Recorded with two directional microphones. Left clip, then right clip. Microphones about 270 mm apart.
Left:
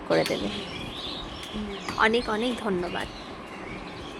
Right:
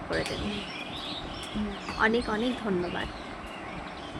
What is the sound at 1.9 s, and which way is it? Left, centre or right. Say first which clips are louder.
A woman's voice: left 3 dB; centre.